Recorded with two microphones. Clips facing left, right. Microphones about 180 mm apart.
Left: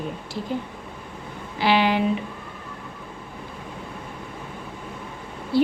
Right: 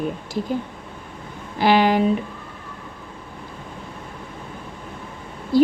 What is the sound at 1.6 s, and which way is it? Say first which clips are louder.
Speech: right 4 dB; 45° right (ahead or behind).